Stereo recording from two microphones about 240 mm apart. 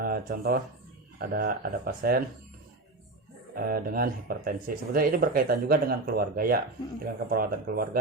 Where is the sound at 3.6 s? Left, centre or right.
Right.